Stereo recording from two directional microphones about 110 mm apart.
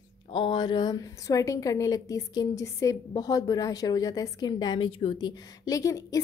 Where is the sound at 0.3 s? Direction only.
45° left (ahead or behind).